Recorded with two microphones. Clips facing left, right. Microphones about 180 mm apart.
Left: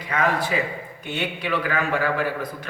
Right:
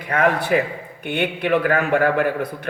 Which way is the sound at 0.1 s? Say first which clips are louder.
Right 5 dB; 60° right (ahead or behind).